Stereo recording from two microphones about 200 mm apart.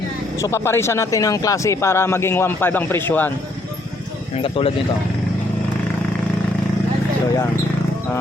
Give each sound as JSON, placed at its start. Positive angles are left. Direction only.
{"t": 0.3, "sound": "speech", "side_deg": 15}
{"t": 4.4, "sound": "speech", "side_deg": 30}